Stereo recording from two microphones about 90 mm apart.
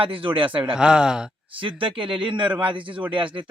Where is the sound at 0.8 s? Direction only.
10° right (ahead or behind).